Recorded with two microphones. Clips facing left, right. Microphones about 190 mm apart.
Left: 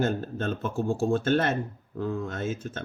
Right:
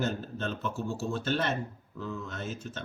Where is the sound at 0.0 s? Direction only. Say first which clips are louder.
Left 5 dB; 50° left (ahead or behind).